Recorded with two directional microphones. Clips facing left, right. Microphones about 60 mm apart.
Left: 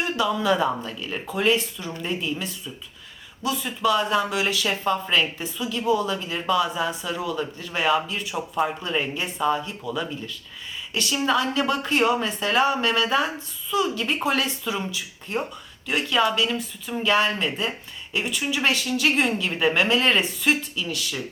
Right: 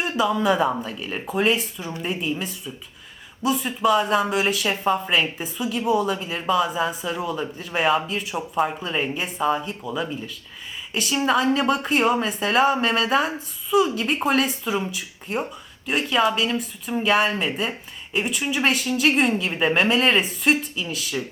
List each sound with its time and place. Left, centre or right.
0.1 s a woman's voice: centre
7.2 s a woman's voice: right
8.0 s a woman's voice: centre